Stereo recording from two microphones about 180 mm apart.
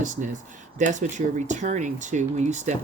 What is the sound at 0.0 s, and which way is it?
Speech, 45° right (ahead or behind).